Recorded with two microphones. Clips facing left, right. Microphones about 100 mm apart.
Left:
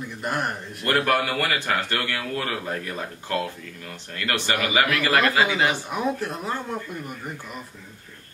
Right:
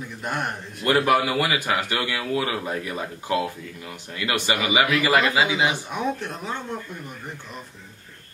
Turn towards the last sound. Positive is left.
turn(degrees=5)  # may be behind; listen again after turning